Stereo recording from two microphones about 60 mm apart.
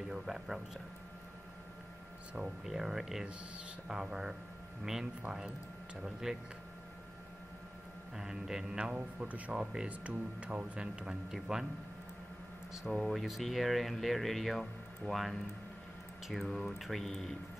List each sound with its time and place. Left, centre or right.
0.1 s speech: centre
2.3 s speech: centre
8.2 s speech: centre
12.7 s speech: centre
16.4 s speech: centre